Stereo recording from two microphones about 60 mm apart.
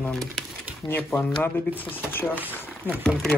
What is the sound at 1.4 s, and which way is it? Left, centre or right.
Speech, left.